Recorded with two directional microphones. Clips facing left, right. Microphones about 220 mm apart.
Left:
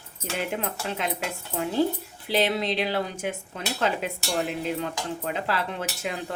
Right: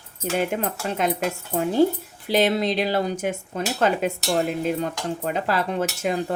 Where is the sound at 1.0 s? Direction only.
45° right (ahead or behind).